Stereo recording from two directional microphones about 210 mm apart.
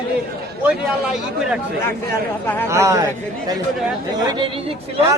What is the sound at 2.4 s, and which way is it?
Speech, 10° left (ahead or behind).